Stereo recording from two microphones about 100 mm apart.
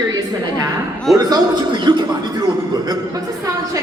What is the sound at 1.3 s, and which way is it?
Speech, 50° right (ahead or behind).